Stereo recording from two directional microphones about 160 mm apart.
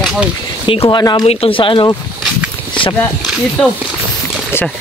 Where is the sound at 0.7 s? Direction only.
30° left (ahead or behind).